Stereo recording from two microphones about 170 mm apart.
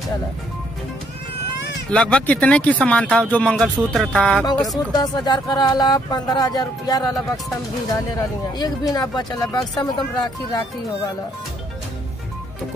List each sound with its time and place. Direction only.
1.9 s speech: 5° left (ahead or behind)
4.9 s speech: 25° left (ahead or behind)
8.5 s speech: 25° left (ahead or behind)